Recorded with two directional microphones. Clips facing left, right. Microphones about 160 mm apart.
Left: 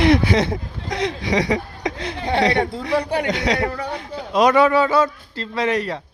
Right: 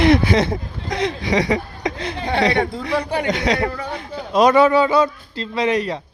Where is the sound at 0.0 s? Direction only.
50° right (ahead or behind).